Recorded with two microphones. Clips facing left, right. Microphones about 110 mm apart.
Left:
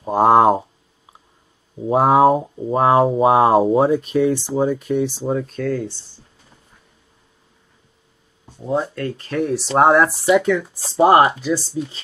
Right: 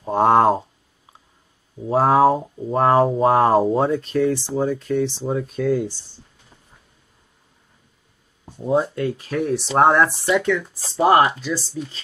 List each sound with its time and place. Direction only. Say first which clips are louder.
0.0 s speech: left 2 dB; 5° left (ahead or behind)
1.9 s speech: left 2 dB; 10° left (ahead or behind)
2.7 s speech: left 1 dB; 5° left (ahead or behind)
8.7 s speech: right 2 dB; 5° right (ahead or behind)